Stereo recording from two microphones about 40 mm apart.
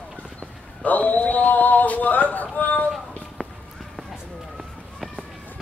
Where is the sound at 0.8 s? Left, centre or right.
Left.